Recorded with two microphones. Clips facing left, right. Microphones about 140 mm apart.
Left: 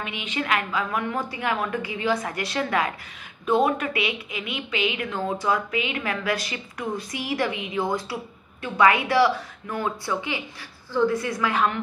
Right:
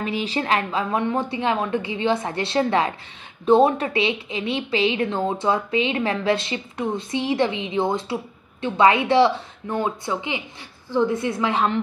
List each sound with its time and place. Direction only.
0.0 s a woman's voice: 35° right (ahead or behind)